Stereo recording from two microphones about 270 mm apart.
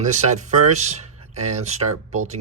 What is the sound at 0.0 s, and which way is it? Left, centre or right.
Speech, right.